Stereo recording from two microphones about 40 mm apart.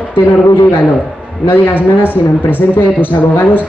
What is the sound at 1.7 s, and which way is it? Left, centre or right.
Speech, left.